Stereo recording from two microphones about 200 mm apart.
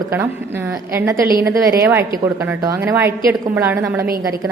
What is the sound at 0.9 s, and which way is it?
A woman's voice, 15° right (ahead or behind).